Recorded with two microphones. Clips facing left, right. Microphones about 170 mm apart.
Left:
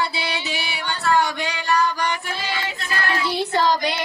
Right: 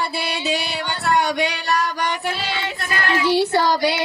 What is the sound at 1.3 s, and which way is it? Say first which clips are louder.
Female singing: right 5 dB; 75° right (ahead or behind).